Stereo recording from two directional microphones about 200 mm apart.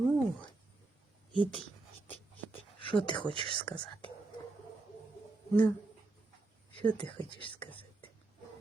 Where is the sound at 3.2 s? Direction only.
25° right (ahead or behind).